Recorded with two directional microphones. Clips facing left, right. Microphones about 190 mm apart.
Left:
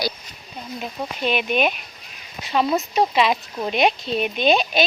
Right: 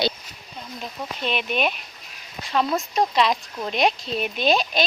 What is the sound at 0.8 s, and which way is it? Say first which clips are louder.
Speech: left 4 dB; 5° left (ahead or behind).